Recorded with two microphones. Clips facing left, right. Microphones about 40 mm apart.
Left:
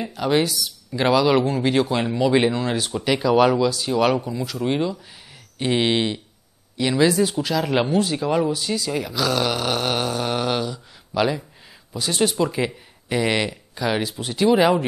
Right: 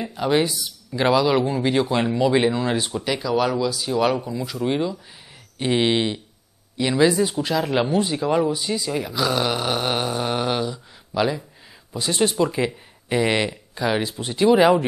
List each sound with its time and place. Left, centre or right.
0.2 s speech: centre
0.9 s speech: centre
3.9 s speech: centre
11.1 s speech: centre
11.9 s speech: right
12.4 s speech: centre